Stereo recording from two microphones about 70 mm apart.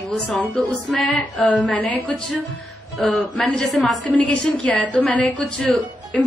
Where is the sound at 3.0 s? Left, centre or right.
Centre.